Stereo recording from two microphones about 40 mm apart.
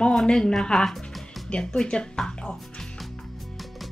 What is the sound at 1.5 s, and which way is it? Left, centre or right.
Speech, centre.